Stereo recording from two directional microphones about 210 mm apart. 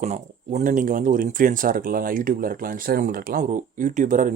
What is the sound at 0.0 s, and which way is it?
Speech, 35° right (ahead or behind).